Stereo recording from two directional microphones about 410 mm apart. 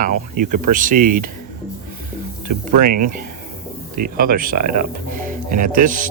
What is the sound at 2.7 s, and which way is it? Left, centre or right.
Speech, centre.